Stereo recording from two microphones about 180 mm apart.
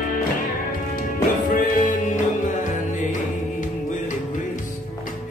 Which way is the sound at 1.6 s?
45° left (ahead or behind).